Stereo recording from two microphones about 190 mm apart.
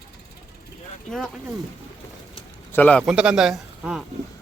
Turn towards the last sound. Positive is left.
turn(degrees=-5)  # may be behind; listen again after turning